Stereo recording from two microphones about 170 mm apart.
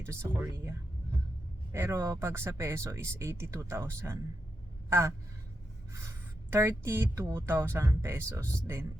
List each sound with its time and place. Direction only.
0.0 s speech: 15° right (ahead or behind)